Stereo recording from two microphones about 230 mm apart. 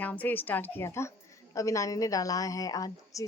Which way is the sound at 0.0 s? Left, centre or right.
Centre.